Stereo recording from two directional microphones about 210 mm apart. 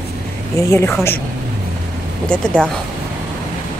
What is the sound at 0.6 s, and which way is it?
Speech, 15° left (ahead or behind).